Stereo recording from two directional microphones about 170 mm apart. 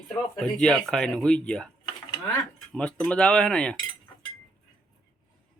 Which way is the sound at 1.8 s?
25° left (ahead or behind).